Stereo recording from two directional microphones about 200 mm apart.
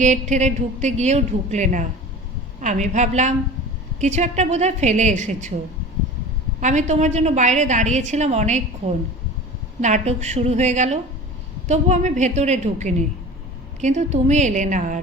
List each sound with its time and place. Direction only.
0.0 s a woman's voice: 35° right (ahead or behind)
6.6 s a woman's voice: 35° right (ahead or behind)
9.8 s a woman's voice: 35° right (ahead or behind)